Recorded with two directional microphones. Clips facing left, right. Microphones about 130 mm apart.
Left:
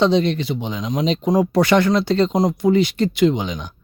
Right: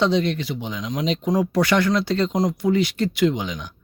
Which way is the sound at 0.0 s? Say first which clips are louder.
Left 4 dB; 25° left (ahead or behind).